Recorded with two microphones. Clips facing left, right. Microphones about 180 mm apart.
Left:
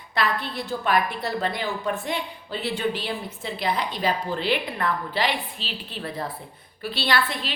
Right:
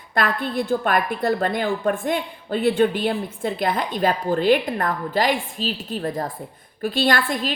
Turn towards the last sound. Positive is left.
turn(degrees=-45)  # may be behind; listen again after turning